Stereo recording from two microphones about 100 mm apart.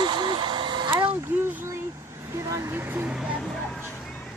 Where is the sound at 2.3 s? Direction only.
30° right (ahead or behind).